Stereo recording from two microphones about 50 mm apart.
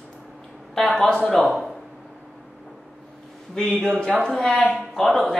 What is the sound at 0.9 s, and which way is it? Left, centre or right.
Speech, centre.